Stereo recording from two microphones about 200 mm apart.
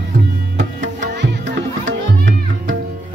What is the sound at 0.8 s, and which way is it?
Music, 60° right (ahead or behind).